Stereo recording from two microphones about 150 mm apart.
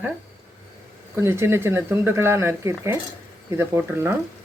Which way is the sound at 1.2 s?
15° right (ahead or behind).